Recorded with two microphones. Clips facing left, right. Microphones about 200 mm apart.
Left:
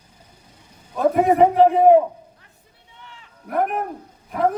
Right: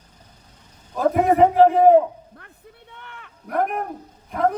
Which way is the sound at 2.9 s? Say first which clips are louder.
Right 1 dB; 60° right (ahead or behind).